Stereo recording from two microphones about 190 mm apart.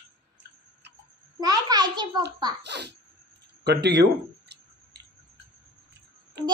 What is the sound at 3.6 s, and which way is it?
Speech, 60° right (ahead or behind).